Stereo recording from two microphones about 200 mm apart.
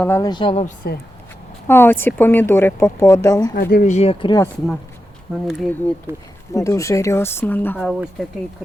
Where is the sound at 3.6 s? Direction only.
45° left (ahead or behind); by 4.5 s 20° left (ahead or behind).